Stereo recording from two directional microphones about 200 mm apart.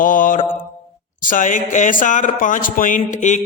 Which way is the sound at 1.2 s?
40° left (ahead or behind).